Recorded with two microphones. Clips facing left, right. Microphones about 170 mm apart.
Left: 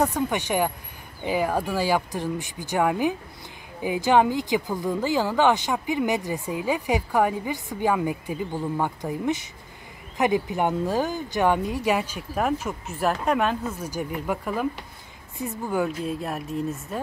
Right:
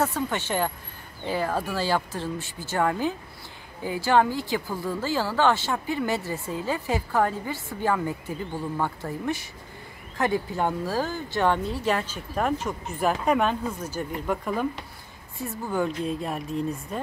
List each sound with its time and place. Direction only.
0.0 s speech: 15° left (ahead or behind)
15.3 s speech: 20° left (ahead or behind)
15.8 s speech: 5° left (ahead or behind)